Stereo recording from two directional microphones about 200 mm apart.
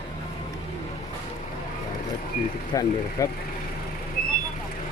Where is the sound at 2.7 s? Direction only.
15° left (ahead or behind).